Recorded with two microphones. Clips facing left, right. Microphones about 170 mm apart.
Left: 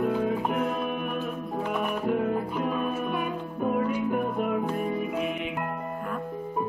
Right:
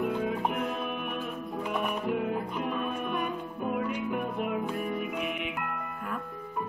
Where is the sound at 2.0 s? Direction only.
40° left (ahead or behind).